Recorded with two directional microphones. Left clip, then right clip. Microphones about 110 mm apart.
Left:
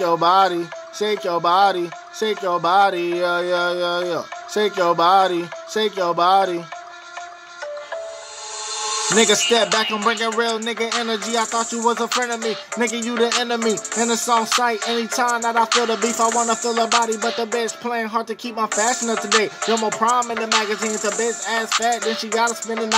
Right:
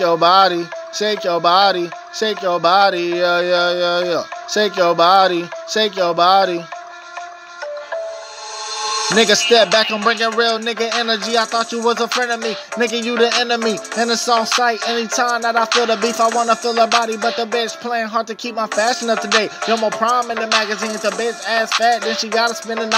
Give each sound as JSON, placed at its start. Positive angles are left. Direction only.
{"t": 0.0, "sound": "speech", "side_deg": -45}
{"t": 8.7, "sound": "a sound", "side_deg": -25}
{"t": 9.4, "sound": "music", "side_deg": -40}
{"t": 10.0, "sound": "music", "side_deg": -30}
{"t": 10.6, "sound": "speech", "side_deg": -45}
{"t": 11.1, "sound": "music", "side_deg": -40}
{"t": 12.9, "sound": "speech", "side_deg": -45}
{"t": 13.6, "sound": "music", "side_deg": -30}
{"t": 14.1, "sound": "speech", "side_deg": -40}
{"t": 14.8, "sound": "music", "side_deg": -35}